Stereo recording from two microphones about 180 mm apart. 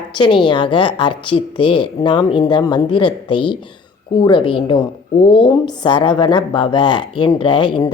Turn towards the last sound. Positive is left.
turn(degrees=25)  # may be behind; listen again after turning